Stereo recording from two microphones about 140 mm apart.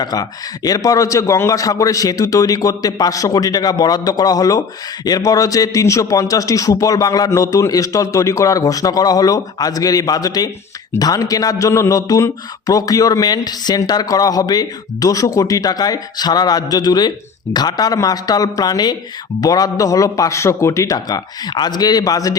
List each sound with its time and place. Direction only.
0.0 s speech: 25° left (ahead or behind)